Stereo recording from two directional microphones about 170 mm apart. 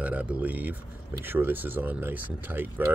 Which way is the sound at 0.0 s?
10° right (ahead or behind).